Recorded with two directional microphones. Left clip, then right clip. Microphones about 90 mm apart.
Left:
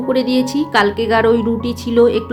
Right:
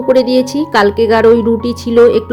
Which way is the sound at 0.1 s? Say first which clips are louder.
Right 7 dB; 45° right (ahead or behind).